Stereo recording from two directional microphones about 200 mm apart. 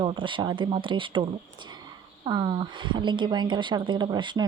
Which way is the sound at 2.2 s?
20° right (ahead or behind).